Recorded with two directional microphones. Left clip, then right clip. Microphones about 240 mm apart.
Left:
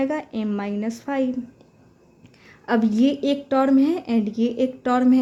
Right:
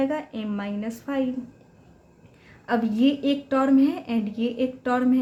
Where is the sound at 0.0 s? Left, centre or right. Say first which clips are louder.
Left 2 dB; left.